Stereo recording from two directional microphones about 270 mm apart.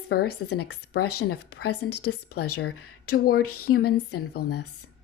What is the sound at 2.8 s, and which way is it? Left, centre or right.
Speech, left.